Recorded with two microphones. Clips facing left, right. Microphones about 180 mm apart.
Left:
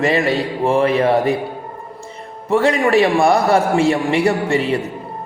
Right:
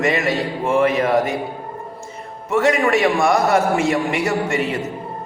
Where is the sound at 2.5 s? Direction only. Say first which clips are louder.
Left 2 dB; 30° left (ahead or behind).